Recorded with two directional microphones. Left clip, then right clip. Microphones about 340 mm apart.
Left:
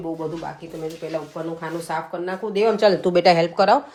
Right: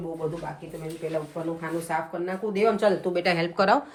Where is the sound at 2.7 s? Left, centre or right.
Left.